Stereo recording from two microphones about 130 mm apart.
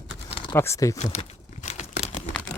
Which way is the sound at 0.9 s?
60° left (ahead or behind).